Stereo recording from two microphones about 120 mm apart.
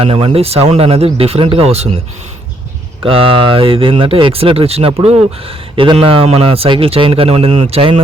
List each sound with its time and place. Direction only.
0.0 s speech: 50° right (ahead or behind)
3.0 s speech: 50° right (ahead or behind)